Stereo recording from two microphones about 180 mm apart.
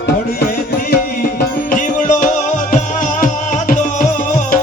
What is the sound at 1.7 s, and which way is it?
Music, 45° left (ahead or behind).